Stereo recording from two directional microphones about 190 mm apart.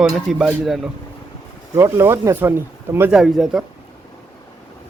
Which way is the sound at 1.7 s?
15° right (ahead or behind).